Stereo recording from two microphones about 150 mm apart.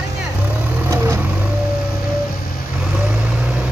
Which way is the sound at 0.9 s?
20° right (ahead or behind).